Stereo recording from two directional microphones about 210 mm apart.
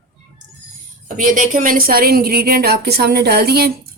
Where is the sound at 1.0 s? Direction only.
40° right (ahead or behind).